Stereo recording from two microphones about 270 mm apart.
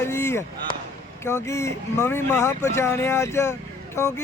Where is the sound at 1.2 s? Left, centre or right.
Centre.